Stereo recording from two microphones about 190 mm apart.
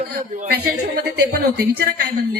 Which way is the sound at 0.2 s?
50° right (ahead or behind).